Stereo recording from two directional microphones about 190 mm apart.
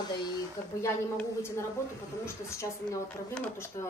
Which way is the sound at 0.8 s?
15° left (ahead or behind).